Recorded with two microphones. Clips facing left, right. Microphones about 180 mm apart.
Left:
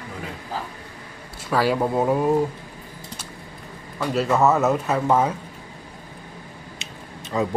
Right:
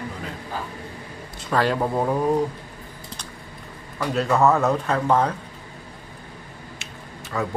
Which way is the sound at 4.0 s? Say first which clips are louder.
Even; centre (ahead or behind).